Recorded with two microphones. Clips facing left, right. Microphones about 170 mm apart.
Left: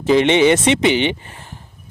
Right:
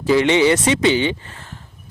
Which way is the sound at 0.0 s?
20° left (ahead or behind).